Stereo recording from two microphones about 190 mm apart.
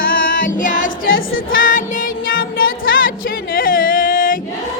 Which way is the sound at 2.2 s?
50° left (ahead or behind).